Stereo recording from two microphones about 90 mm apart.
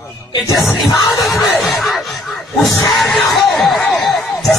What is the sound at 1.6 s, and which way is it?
Music, centre (ahead or behind).